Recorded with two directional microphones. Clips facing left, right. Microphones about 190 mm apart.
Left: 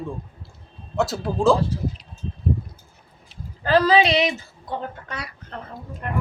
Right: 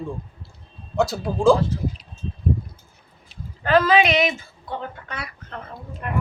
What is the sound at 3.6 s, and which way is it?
Speech, 35° left (ahead or behind).